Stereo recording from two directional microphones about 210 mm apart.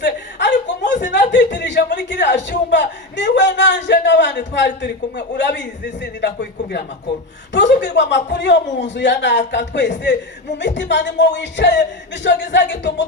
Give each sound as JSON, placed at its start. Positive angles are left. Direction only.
{"t": 0.0, "sound": "chuckle", "side_deg": 55}
{"t": 1.1, "sound": "a sound", "side_deg": 55}
{"t": 1.9, "sound": "a man's voice", "side_deg": 55}